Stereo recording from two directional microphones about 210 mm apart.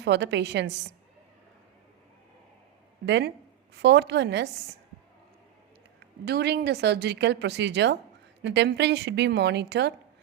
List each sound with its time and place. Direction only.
0.0 s a woman's voice: 55° right (ahead or behind)
3.1 s a woman's voice: 55° right (ahead or behind)
6.2 s speech: 50° right (ahead or behind)